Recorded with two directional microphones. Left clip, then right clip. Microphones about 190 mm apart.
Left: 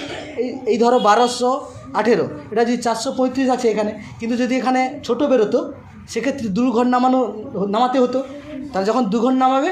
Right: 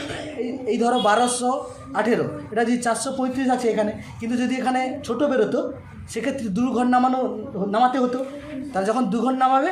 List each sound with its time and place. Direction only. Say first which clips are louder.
0.4 s a man's voice: left 6 dB; 20° left (ahead or behind)